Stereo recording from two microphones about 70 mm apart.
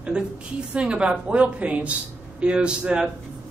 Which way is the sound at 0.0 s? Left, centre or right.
Centre.